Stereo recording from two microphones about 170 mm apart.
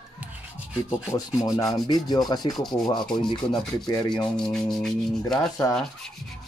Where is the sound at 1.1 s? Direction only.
20° left (ahead or behind).